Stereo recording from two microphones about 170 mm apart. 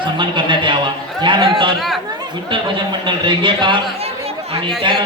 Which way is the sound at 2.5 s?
30° right (ahead or behind).